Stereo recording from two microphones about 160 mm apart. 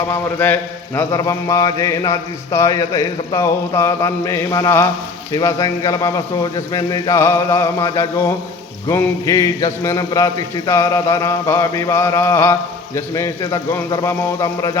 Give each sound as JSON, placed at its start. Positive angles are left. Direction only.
{"t": 0.1, "sound": "speech", "side_deg": 10}
{"t": 10.7, "sound": "a sound", "side_deg": 20}
{"t": 13.1, "sound": "speech", "side_deg": 20}